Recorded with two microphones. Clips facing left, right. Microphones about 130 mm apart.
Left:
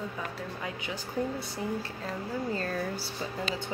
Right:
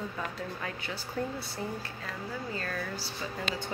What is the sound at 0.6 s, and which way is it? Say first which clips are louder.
Speech: left 2 dB; 15° left (ahead or behind).